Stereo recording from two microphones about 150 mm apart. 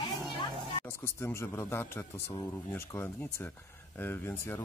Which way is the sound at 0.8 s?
15° left (ahead or behind).